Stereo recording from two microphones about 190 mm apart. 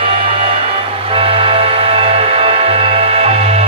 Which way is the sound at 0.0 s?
30° right (ahead or behind).